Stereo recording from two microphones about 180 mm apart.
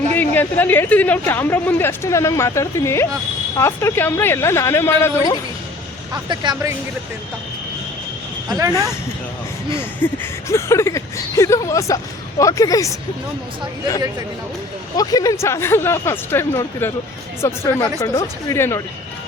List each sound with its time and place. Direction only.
0.1 s a woman's voice: 10° left (ahead or behind)
6.2 s speech: 25° right (ahead or behind)
8.4 s speech: 20° right (ahead or behind)
10.0 s a woman's voice: 10° left (ahead or behind)
14.9 s a woman's voice: 20° left (ahead or behind)